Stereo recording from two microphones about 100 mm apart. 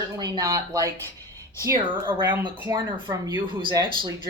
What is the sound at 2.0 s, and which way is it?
Speech, 20° right (ahead or behind).